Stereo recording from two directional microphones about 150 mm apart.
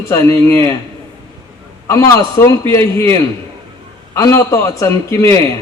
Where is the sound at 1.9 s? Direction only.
20° left (ahead or behind).